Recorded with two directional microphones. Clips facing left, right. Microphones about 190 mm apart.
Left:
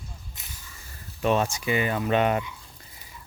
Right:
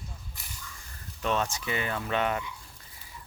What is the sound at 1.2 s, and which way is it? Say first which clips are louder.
Speech: left 6 dB; 15° left (ahead or behind).